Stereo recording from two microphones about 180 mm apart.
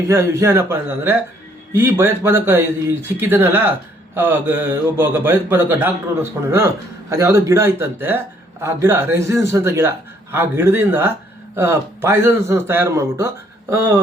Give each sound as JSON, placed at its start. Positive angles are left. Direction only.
{"t": 0.1, "sound": "speech", "side_deg": -15}